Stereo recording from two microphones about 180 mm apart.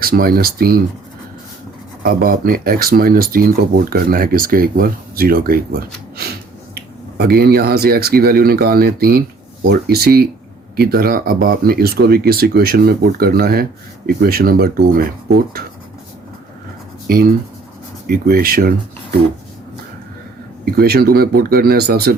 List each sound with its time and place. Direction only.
0.0 s speech: 55° right (ahead or behind)
2.0 s speech: 55° right (ahead or behind)
17.1 s speech: 55° right (ahead or behind)
20.7 s speech: 60° right (ahead or behind)